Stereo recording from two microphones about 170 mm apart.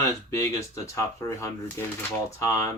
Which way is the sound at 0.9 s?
15° left (ahead or behind).